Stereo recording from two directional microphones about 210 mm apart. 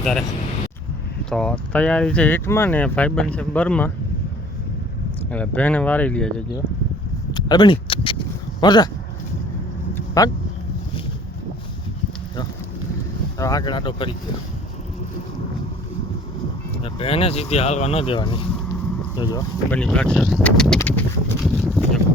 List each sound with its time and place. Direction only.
0.0 s speech: centre (ahead or behind)
1.3 s speech: 5° left (ahead or behind)
5.3 s speech: 5° left (ahead or behind)
7.3 s speech: 20° left (ahead or behind)
9.9 s vehicle: 15° left (ahead or behind)
13.4 s speech: 15° left (ahead or behind)
16.8 s speech: 25° left (ahead or behind)
19.7 s speech: 5° left (ahead or behind)